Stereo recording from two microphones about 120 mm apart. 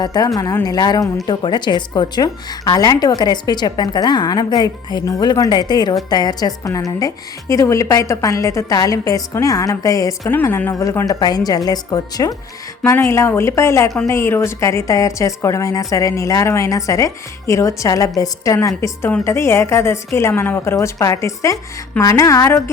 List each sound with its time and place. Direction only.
0.0 s a woman's voice: 35° left (ahead or behind)
10.2 s a woman's voice: 20° left (ahead or behind)